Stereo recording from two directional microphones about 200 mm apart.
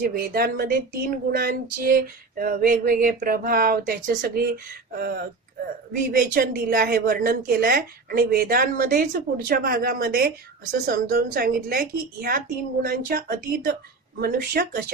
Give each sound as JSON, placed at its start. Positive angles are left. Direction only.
{"t": 0.0, "sound": "speech", "side_deg": -50}